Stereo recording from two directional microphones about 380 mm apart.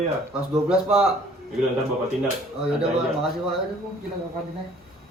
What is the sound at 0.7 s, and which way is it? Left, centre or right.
Speech, centre.